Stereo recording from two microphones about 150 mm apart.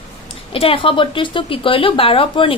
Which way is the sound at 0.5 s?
35° left (ahead or behind).